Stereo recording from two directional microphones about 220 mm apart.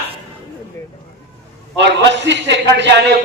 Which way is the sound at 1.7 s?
55° right (ahead or behind).